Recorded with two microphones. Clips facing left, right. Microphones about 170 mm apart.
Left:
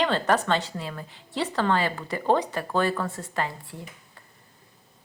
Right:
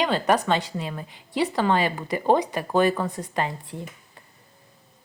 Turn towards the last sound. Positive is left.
turn(degrees=-20)  # may be behind; listen again after turning